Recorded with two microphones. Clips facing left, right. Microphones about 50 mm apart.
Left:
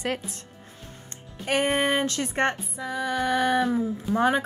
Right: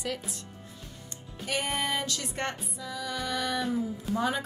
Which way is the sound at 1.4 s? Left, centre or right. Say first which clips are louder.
Left 7 dB; left.